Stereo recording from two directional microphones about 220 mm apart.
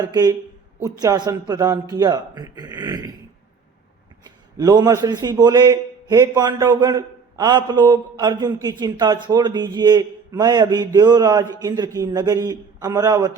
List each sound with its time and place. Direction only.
0.0 s a man's voice: 20° right (ahead or behind)
4.5 s a man's voice: 15° right (ahead or behind)